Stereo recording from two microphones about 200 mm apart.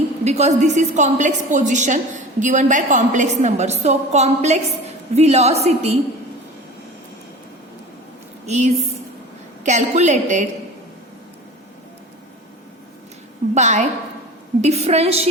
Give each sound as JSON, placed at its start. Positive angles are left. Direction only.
{"t": 0.3, "sound": "a woman's voice", "side_deg": -35}
{"t": 8.4, "sound": "a woman's voice", "side_deg": -35}
{"t": 13.5, "sound": "a woman's voice", "side_deg": -35}